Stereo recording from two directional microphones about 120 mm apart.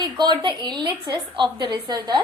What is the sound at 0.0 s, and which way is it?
A woman's voice, 35° right (ahead or behind).